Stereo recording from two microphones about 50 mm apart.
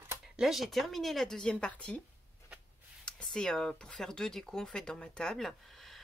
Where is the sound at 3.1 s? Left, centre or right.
Centre.